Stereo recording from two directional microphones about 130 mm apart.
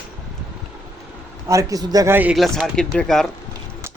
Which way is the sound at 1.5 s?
25° right (ahead or behind).